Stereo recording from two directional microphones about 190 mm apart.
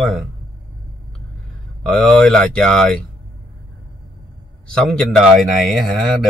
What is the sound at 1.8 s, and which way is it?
Speech, 5° left (ahead or behind).